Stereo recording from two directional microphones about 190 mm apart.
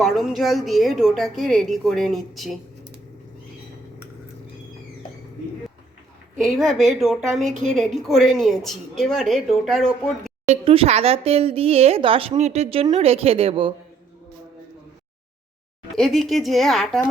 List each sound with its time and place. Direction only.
0.0 s speech: centre (ahead or behind)
6.6 s speech: centre (ahead or behind)
10.4 s speech: 35° right (ahead or behind)
16.0 s speech: centre (ahead or behind)